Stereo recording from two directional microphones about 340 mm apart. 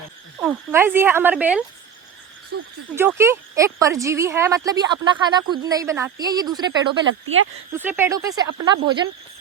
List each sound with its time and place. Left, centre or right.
0.4 s speech: centre
2.5 s speech: right
2.9 s a woman's voice: centre